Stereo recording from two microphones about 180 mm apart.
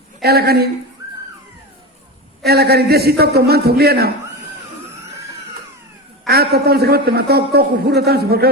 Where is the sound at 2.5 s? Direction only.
60° right (ahead or behind).